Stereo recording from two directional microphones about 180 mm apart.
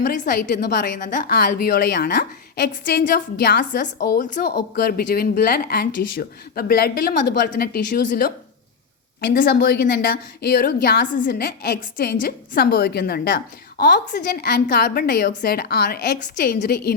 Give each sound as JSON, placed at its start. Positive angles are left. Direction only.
{"t": 0.0, "sound": "a woman's voice", "side_deg": 50}
{"t": 9.3, "sound": "a woman's voice", "side_deg": 55}